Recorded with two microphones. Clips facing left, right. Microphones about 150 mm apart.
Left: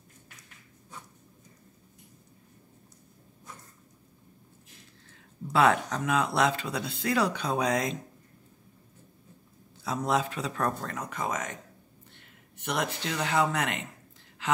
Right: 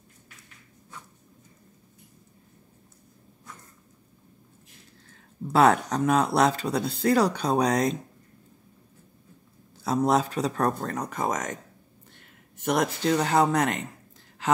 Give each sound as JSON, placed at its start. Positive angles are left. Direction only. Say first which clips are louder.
{"t": 5.5, "sound": "speech", "louder": "right 4 dB", "side_deg": -40}
{"t": 9.8, "sound": "speech", "louder": "right 5 dB", "side_deg": -40}
{"t": 12.5, "sound": "speech", "louder": "right 6 dB", "side_deg": -45}